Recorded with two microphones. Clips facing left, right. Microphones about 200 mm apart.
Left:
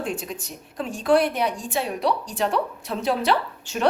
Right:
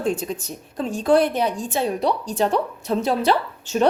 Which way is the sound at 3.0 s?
40° right (ahead or behind).